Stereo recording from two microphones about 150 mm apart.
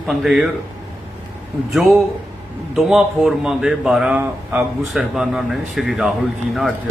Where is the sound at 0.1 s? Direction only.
Centre (ahead or behind).